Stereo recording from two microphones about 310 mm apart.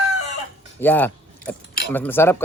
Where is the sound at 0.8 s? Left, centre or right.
Centre.